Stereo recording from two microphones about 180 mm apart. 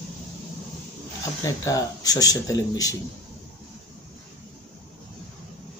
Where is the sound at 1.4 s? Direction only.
15° left (ahead or behind).